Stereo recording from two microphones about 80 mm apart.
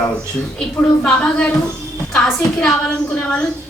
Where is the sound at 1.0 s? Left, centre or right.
Centre.